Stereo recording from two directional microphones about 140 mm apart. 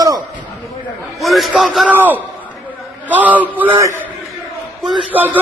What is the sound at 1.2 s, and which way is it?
Speech, centre (ahead or behind).